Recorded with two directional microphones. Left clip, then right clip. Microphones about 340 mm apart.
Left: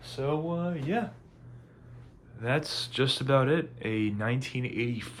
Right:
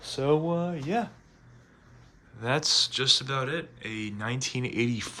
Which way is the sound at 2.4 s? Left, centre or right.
Centre.